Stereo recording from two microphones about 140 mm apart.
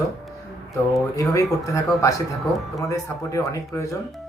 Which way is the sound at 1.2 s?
20° left (ahead or behind).